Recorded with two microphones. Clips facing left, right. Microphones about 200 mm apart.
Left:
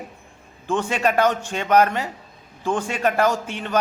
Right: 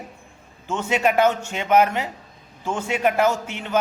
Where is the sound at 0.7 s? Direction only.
10° right (ahead or behind).